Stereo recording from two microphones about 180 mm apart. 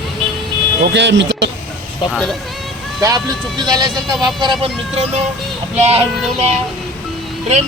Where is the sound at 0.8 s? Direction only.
75° right (ahead or behind).